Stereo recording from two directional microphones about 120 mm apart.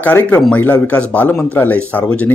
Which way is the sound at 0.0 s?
15° left (ahead or behind).